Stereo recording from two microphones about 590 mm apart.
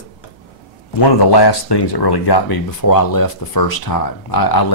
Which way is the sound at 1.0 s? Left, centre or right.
Left.